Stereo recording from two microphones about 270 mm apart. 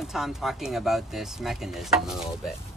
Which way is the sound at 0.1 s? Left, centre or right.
Centre.